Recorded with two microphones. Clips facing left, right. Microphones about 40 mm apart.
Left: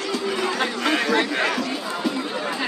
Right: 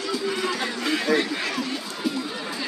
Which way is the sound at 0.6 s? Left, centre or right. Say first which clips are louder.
Left 4 dB; left.